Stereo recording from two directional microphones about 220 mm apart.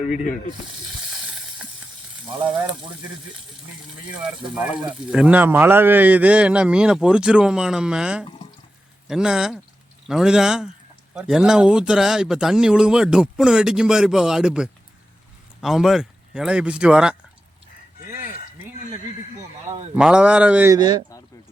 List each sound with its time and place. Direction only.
5.1 s speech: 5° right (ahead or behind)
20.0 s speech: 5° right (ahead or behind)
20.7 s speech: 20° right (ahead or behind)